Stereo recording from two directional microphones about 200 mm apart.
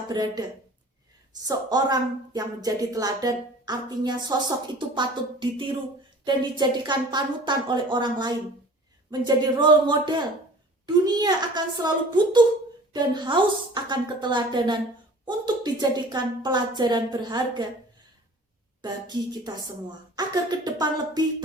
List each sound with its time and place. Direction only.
0.1 s a woman's voice: 20° right (ahead or behind)
1.5 s a woman's voice: 20° right (ahead or behind)
18.8 s a woman's voice: 20° right (ahead or behind)